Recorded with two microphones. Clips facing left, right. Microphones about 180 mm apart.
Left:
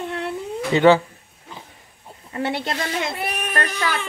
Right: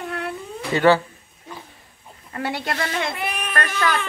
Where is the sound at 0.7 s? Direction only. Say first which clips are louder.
Left 2 dB; 20° left (ahead or behind).